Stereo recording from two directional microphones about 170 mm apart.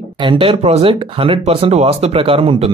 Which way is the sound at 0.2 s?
30° right (ahead or behind).